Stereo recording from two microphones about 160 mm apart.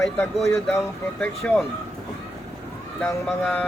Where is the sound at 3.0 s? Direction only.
10° left (ahead or behind).